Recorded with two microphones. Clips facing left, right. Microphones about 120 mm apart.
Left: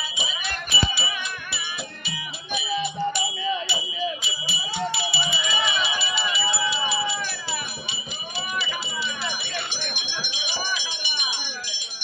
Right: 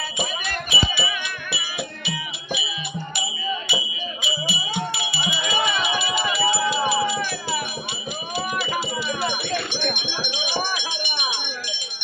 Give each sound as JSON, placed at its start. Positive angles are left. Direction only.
{"t": 0.2, "sound": "music", "side_deg": -50}
{"t": 4.2, "sound": "a sound", "side_deg": -55}
{"t": 8.4, "sound": "wind chime", "side_deg": -50}